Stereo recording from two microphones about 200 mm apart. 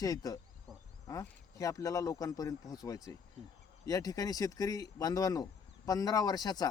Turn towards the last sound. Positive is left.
turn(degrees=20)  # may be behind; listen again after turning